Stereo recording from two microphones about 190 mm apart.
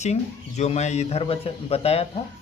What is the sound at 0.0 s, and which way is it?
A man's voice, 35° left (ahead or behind).